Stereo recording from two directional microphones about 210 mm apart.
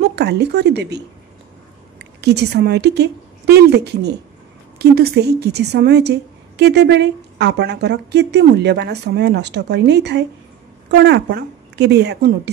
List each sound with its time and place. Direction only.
0.0 s speech: 50° right (ahead or behind)
2.2 s a woman's voice: 50° right (ahead or behind)